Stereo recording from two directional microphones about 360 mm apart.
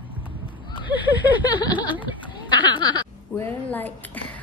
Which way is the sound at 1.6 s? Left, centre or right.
Centre.